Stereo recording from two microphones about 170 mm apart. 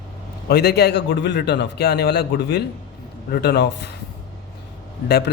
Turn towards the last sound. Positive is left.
turn(degrees=70)  # may be behind; listen again after turning